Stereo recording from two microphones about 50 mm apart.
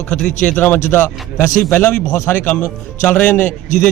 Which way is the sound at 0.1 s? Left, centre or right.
Centre.